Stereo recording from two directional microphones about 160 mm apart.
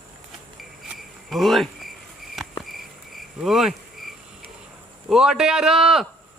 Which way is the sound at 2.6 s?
Centre (ahead or behind).